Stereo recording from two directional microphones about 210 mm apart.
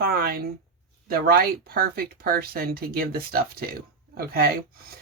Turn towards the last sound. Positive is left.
turn(degrees=-45)  # may be behind; listen again after turning